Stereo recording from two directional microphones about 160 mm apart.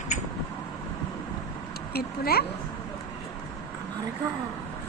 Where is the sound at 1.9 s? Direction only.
75° left (ahead or behind).